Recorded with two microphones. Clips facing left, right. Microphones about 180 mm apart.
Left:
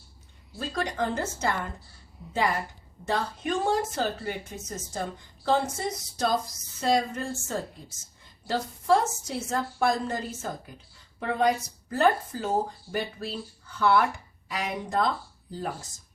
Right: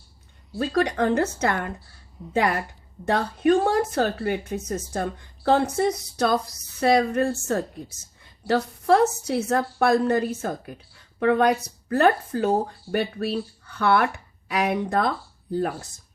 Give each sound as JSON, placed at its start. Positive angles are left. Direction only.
{"t": 0.6, "sound": "speech", "side_deg": -65}